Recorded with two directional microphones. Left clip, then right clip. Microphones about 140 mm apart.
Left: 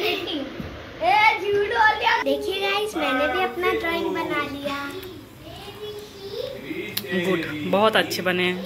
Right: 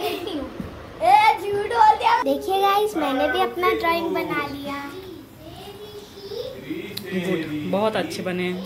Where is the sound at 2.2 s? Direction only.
60° right (ahead or behind).